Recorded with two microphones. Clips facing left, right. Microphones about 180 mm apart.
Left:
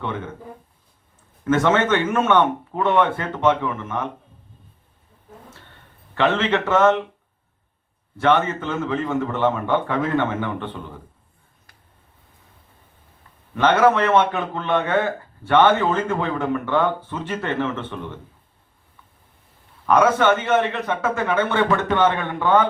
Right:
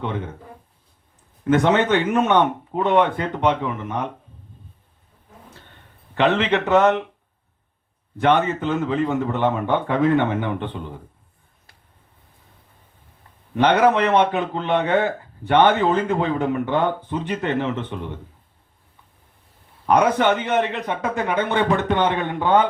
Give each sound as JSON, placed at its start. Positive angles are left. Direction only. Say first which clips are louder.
{"t": 1.5, "sound": "a man's voice", "louder": "right 1 dB", "side_deg": -15}
{"t": 6.1, "sound": "a man's voice", "louder": "right 1 dB", "side_deg": -15}
{"t": 8.2, "sound": "a man's voice", "louder": "right 1 dB", "side_deg": -15}
{"t": 13.6, "sound": "a man's voice", "louder": "even", "side_deg": -15}
{"t": 19.8, "sound": "a man's voice", "louder": "left 1 dB", "side_deg": -15}